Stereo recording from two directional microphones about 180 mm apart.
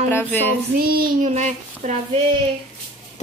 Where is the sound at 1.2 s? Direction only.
40° right (ahead or behind).